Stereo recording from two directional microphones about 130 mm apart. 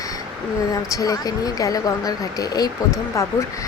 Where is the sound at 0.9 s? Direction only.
25° left (ahead or behind).